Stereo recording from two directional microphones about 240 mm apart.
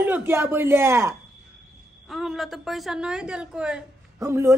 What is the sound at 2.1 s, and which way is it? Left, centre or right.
A woman's voice, centre.